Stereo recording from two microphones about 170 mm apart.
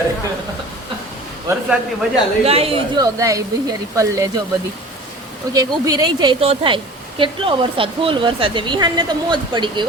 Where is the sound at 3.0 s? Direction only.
20° right (ahead or behind).